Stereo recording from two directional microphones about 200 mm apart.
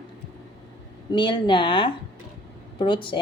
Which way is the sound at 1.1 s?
25° left (ahead or behind).